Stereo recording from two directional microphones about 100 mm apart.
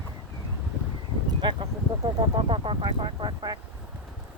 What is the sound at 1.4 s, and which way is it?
Speech, 50° right (ahead or behind).